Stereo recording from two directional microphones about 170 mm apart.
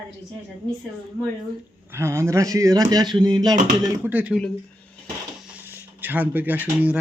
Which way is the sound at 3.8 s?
10° right (ahead or behind).